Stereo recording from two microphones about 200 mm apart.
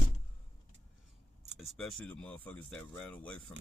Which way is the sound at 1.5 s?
Centre (ahead or behind).